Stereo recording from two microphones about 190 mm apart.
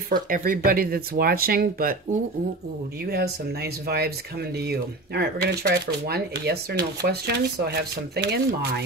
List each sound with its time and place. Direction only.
0.1 s speech: 50° right (ahead or behind)
3.1 s speech: 55° right (ahead or behind)